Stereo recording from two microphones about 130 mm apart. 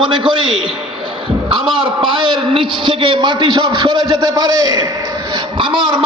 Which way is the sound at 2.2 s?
40° right (ahead or behind).